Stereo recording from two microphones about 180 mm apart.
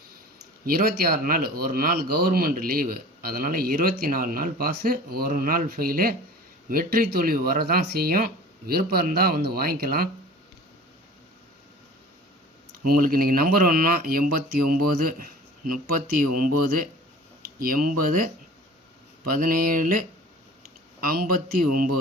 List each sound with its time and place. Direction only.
0.6 s speech: 55° right (ahead or behind)
12.8 s speech: 55° right (ahead or behind)
19.3 s speech: 55° right (ahead or behind)